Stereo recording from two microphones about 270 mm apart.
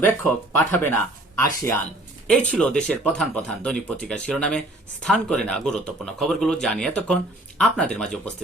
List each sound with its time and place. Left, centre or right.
0.5 s speech: centre